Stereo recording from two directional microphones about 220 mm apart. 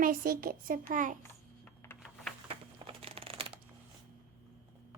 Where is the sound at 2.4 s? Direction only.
25° right (ahead or behind).